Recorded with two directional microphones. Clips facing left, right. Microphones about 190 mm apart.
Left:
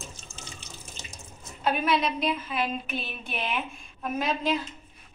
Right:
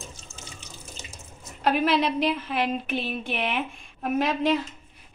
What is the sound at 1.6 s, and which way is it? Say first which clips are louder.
A woman's voice: right 3 dB; 70° right (ahead or behind).